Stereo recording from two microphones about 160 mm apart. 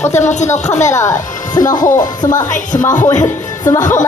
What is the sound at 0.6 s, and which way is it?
Speech, 45° left (ahead or behind).